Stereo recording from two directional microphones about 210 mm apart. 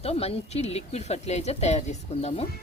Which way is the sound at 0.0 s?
30° left (ahead or behind).